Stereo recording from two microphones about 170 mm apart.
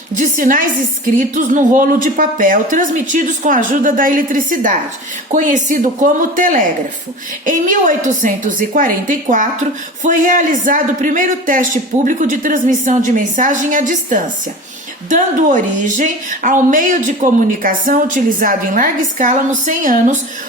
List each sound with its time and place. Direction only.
0.2 s a woman's voice: 50° right (ahead or behind)